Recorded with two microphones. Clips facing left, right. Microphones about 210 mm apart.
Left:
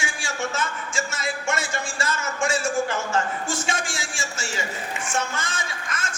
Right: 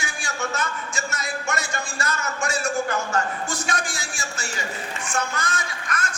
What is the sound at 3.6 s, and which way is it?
A woman's voice, 25° left (ahead or behind).